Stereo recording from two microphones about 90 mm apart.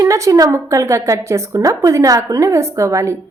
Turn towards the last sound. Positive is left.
turn(degrees=-35)  # may be behind; listen again after turning